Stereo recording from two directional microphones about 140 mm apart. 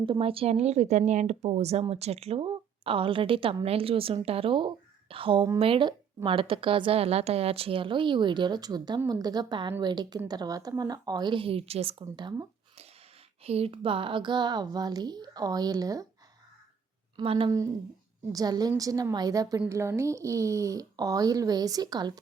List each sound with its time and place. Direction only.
0.0 s a woman's voice: 40° right (ahead or behind)
13.4 s speech: 45° right (ahead or behind); by 16.0 s 25° right (ahead or behind)
17.2 s a woman's voice: 40° right (ahead or behind)
18.3 s speech: 25° right (ahead or behind)